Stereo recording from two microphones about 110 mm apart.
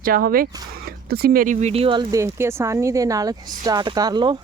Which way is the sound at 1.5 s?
75° right (ahead or behind).